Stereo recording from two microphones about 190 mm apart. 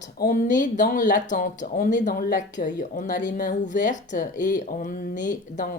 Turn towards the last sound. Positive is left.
turn(degrees=45)  # may be behind; listen again after turning